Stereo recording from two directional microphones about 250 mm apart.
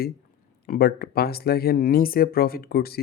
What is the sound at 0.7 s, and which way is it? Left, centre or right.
Speech, left.